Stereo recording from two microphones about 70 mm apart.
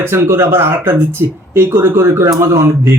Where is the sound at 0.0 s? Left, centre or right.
Right.